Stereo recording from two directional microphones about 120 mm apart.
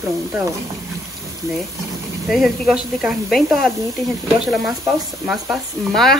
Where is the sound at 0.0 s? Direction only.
25° right (ahead or behind).